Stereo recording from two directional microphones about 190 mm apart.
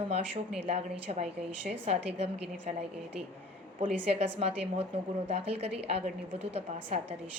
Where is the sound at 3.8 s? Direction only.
35° right (ahead or behind).